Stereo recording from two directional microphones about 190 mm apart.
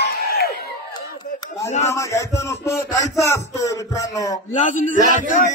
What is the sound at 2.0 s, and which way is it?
Speech, 15° left (ahead or behind).